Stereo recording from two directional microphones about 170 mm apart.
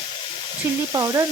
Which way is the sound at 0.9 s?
20° right (ahead or behind).